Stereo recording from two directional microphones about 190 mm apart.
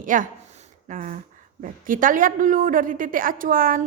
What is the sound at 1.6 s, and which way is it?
A woman's voice, 45° right (ahead or behind).